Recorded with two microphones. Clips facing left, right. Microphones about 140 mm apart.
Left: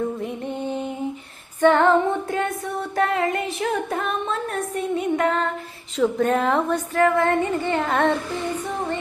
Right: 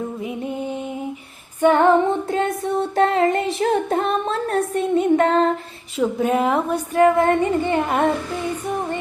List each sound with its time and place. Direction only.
0.2 s music: 5° right (ahead or behind); by 5.5 s 30° right (ahead or behind)
6.0 s speech: 10° right (ahead or behind)